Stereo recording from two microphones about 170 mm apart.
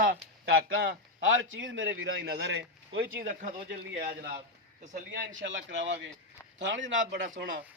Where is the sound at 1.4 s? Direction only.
90° right; by 4.3 s 75° right (ahead or behind).